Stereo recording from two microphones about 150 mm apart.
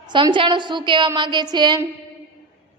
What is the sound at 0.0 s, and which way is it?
A woman's voice, 30° right (ahead or behind).